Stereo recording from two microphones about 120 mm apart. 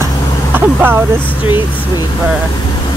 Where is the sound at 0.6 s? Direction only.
15° right (ahead or behind).